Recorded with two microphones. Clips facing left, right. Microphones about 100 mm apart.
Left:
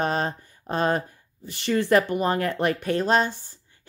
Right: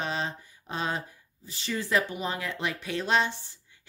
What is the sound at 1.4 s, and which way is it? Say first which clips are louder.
Speech: left 10 dB; 60° left (ahead or behind).